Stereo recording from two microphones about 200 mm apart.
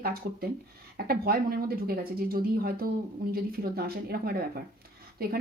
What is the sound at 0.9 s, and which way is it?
Speech, 50° right (ahead or behind).